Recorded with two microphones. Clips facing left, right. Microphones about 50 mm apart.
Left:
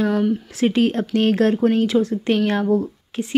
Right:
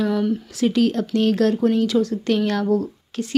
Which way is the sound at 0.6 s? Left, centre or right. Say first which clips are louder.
Even; left.